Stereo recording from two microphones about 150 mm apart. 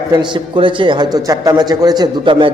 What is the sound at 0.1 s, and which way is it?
A man's voice, 30° right (ahead or behind).